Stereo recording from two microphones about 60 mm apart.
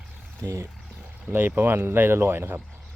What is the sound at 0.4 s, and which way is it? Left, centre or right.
Speech, right.